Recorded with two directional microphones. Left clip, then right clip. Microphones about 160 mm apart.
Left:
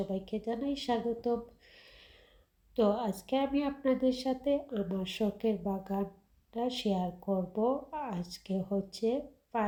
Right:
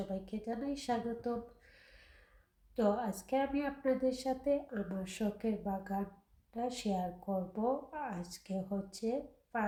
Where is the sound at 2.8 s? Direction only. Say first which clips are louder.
Left 4 dB; 35° left (ahead or behind).